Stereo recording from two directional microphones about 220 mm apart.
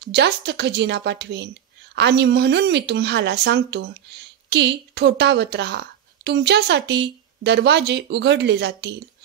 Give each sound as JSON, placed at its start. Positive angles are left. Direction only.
{"t": 0.0, "sound": "a woman's voice", "side_deg": -50}